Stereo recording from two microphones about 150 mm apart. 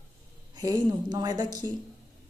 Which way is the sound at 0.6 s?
25° right (ahead or behind).